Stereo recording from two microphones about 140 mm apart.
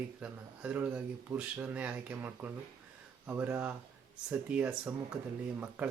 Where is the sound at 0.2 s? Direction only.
10° right (ahead or behind).